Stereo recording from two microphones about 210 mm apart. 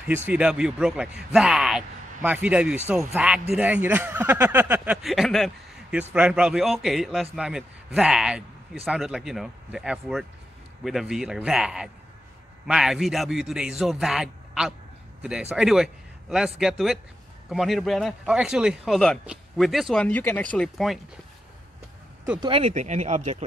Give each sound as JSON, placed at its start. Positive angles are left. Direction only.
{"t": 0.3, "sound": "a man's voice", "side_deg": -5}
{"t": 22.4, "sound": "speech", "side_deg": -25}